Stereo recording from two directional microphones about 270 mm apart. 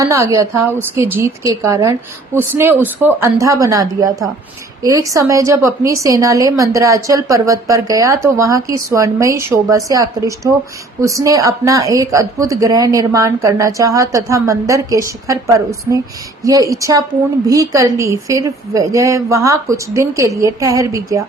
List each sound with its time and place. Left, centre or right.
0.0 s speech: centre